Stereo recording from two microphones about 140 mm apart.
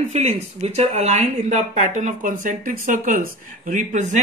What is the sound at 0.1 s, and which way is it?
Speech, 50° right (ahead or behind).